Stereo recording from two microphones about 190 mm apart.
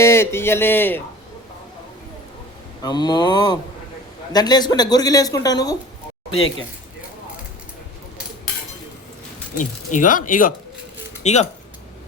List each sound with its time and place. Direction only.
0.0 s speech: 15° left (ahead or behind)
2.8 s speech: 20° left (ahead or behind)
9.6 s speech: 45° left (ahead or behind)